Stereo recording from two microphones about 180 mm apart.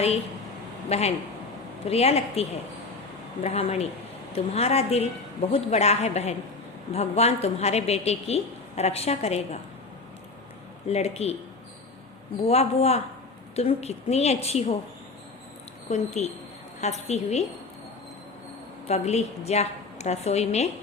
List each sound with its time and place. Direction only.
0.9 s a woman's voice: 35° left (ahead or behind)
10.8 s a woman's voice: 35° left (ahead or behind)
12.4 s a woman's voice: 35° left (ahead or behind)
15.9 s a woman's voice: 40° left (ahead or behind)
18.9 s a woman's voice: 35° left (ahead or behind)